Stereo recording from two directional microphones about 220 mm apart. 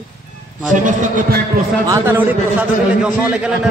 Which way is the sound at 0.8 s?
35° right (ahead or behind).